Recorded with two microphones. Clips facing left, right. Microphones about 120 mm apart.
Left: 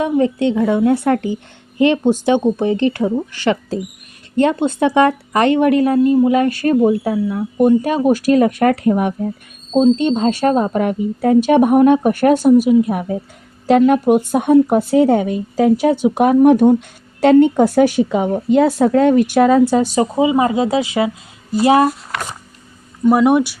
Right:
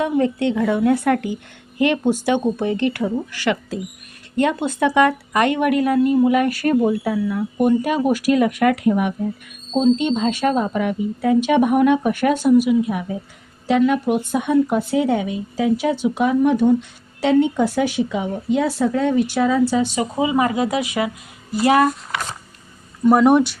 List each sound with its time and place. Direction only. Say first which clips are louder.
0.0 s speech: left 3 dB; 20° left (ahead or behind); by 19.6 s 60° left (ahead or behind)
19.7 s speech: left 5 dB; 40° left (ahead or behind)
20.1 s speech: left 3 dB; 25° left (ahead or behind)
23.0 s speech: left 1 dB; 5° left (ahead or behind)